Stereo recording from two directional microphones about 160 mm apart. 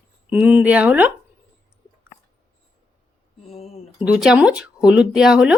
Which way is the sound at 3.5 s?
40° left (ahead or behind).